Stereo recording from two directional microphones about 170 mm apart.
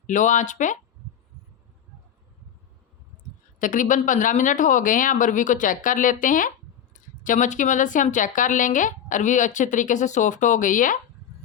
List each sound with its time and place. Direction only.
0.1 s a woman's voice: 45° left (ahead or behind)
3.6 s a woman's voice: 50° left (ahead or behind)